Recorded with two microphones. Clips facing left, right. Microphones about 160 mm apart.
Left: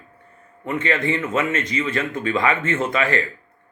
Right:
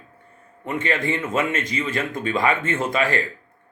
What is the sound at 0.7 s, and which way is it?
Speech, 15° right (ahead or behind).